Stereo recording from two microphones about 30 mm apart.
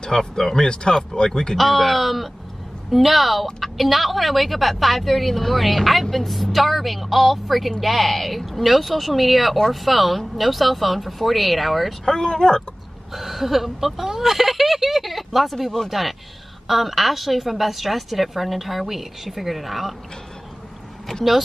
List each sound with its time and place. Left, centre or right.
0.0 s speech: centre
0.6 s speech: left
1.6 s a woman's voice: centre
12.0 s speech: centre
13.1 s a woman's voice: centre